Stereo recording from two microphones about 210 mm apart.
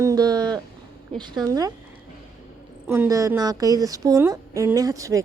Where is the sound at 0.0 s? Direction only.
15° right (ahead or behind).